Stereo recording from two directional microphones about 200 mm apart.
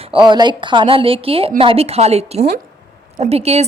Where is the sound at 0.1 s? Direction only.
20° right (ahead or behind).